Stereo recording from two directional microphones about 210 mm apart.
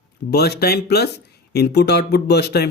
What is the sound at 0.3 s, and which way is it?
Speech, 50° left (ahead or behind).